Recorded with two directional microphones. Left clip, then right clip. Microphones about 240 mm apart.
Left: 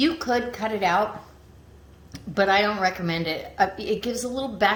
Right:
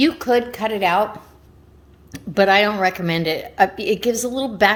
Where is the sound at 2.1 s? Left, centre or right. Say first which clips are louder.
Right 6 dB; right.